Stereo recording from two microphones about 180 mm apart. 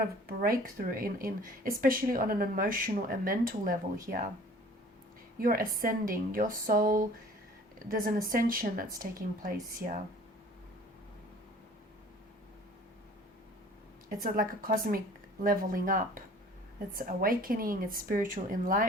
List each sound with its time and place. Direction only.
0.0 s speech: 55° right (ahead or behind)
5.4 s speech: 50° right (ahead or behind)
14.2 s speech: 50° right (ahead or behind)